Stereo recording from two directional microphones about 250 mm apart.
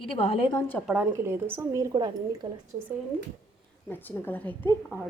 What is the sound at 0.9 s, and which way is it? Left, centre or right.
A woman's voice, centre.